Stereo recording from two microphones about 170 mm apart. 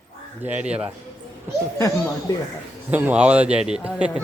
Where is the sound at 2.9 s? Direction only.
10° right (ahead or behind).